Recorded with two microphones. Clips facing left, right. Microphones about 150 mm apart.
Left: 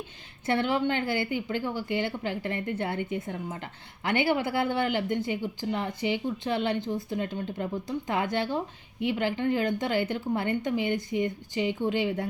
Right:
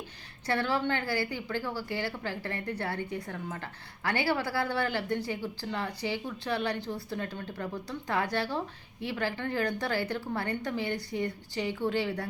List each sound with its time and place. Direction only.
0.4 s speech: 20° left (ahead or behind)